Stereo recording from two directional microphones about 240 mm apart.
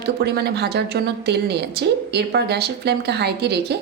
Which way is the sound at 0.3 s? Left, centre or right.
Right.